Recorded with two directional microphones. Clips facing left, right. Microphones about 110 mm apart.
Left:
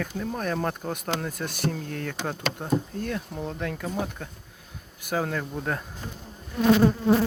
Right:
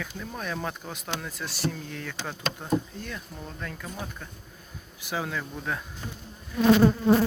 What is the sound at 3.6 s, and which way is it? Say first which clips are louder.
Speech: left 4 dB; 70° left (ahead or behind).